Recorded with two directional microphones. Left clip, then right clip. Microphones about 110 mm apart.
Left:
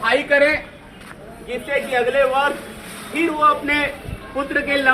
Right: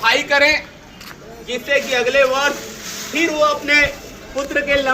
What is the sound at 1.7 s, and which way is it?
Speech, 40° right (ahead or behind).